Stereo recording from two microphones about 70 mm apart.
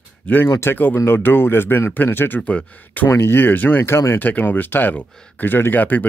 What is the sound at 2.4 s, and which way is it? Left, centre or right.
Speech, centre.